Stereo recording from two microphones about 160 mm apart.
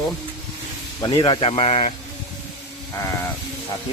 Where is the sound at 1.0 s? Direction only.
30° left (ahead or behind).